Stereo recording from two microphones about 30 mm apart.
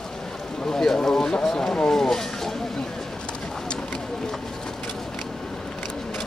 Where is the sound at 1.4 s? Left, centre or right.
Centre.